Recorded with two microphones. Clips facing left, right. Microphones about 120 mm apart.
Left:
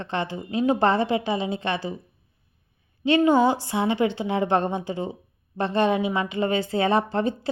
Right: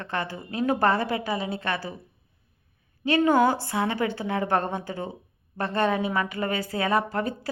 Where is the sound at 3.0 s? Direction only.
20° left (ahead or behind).